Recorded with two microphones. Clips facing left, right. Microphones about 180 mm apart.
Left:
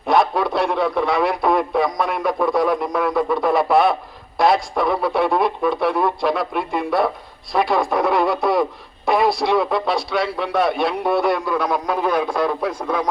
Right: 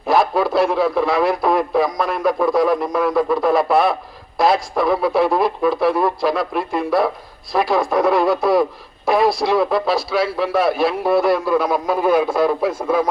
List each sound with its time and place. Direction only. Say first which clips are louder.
0.1 s speech: right 1 dB; centre (ahead or behind)